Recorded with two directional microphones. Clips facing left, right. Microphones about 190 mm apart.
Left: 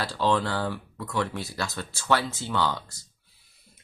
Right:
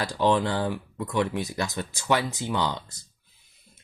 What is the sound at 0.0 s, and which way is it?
Speech, 15° right (ahead or behind).